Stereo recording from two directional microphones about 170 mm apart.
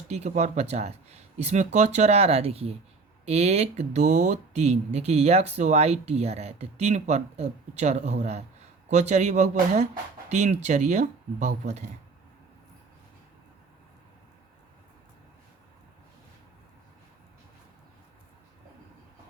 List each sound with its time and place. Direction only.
0.1 s speech: 40° right (ahead or behind)